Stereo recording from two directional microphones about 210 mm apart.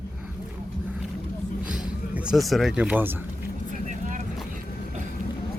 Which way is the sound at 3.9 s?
35° right (ahead or behind).